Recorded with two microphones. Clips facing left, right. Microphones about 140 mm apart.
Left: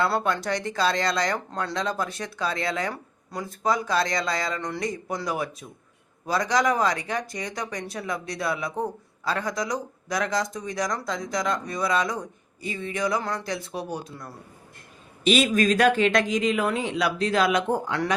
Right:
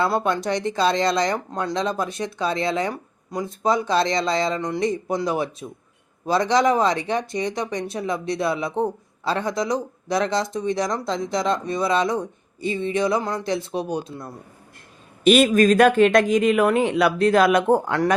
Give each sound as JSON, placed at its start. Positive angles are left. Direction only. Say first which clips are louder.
{"t": 0.0, "sound": "speech", "louder": "right 3 dB", "side_deg": -20}
{"t": 15.2, "sound": "speech", "louder": "right 6 dB", "side_deg": -50}